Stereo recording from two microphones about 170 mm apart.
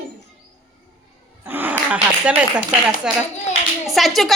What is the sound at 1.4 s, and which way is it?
A woman's voice, 10° right (ahead or behind).